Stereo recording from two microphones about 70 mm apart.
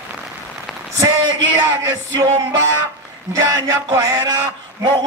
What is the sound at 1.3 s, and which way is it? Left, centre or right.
Speech, right.